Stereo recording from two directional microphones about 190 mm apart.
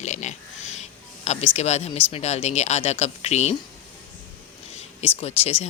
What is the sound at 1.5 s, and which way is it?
Speech, 35° left (ahead or behind).